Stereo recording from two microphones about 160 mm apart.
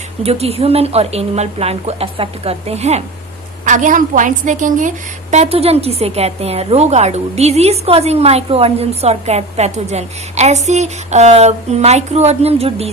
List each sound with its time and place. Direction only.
0.2 s a woman's voice: 40° right (ahead or behind)
3.7 s a woman's voice: 50° right (ahead or behind)
5.3 s a woman's voice: 40° right (ahead or behind)